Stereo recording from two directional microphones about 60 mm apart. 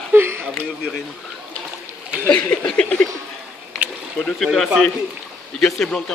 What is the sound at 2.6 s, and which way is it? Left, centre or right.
Speech, centre.